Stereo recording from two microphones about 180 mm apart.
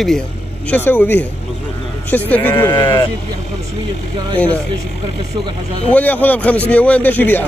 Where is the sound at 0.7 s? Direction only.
10° left (ahead or behind).